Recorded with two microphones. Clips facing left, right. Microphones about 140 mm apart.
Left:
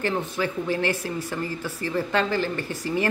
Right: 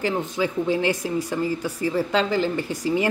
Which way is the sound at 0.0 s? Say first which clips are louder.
Right 2 dB; 15° right (ahead or behind).